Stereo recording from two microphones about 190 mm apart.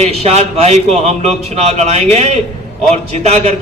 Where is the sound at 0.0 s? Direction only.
35° right (ahead or behind).